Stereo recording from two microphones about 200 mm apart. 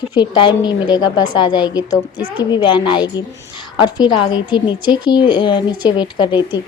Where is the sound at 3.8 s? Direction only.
20° left (ahead or behind).